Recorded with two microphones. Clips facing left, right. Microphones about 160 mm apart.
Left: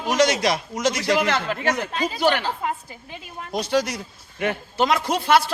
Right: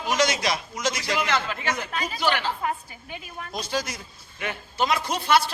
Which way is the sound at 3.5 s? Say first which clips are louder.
Left 8 dB; 70° left (ahead or behind).